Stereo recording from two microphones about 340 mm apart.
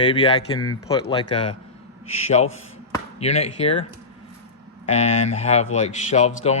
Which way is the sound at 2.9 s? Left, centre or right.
Centre.